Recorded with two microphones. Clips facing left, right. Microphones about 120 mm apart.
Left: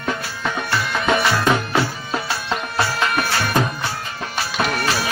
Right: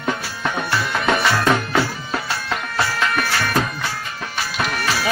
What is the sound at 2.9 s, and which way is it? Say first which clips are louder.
Music: even; 25° left (ahead or behind).